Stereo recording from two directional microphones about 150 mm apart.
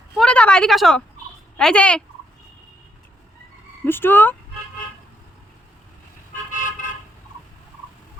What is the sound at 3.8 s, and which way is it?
Speech, 15° left (ahead or behind).